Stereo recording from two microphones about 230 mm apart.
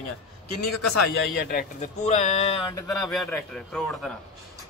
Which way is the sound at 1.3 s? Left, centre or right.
Left.